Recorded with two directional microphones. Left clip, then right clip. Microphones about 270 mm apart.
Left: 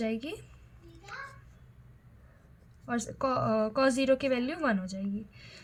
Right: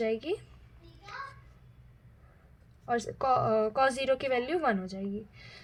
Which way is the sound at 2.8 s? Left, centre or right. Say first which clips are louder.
Right 3 dB; right.